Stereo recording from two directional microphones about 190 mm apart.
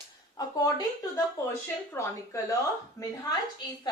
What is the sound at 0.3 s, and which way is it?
Speech, 20° left (ahead or behind).